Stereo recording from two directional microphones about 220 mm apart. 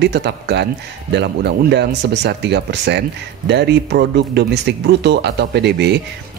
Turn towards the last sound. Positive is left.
turn(degrees=-50)  # may be behind; listen again after turning